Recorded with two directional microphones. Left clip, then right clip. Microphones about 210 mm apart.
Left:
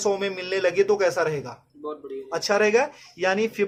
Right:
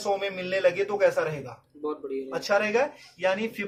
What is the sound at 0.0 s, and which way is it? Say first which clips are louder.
Speech: left 3 dB; 50° left (ahead or behind).